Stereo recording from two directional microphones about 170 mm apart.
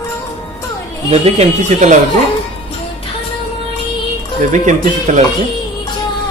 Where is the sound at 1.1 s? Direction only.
40° right (ahead or behind).